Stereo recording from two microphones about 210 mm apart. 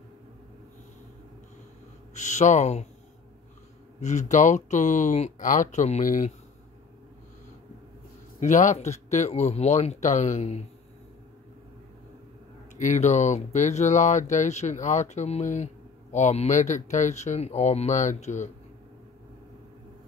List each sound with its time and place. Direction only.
2.1 s speech: 35° left (ahead or behind)
4.0 s speech: 35° left (ahead or behind)
8.4 s speech: 35° left (ahead or behind)
12.7 s speech: 35° left (ahead or behind)